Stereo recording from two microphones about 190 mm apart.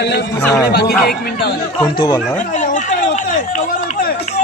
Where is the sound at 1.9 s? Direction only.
25° left (ahead or behind).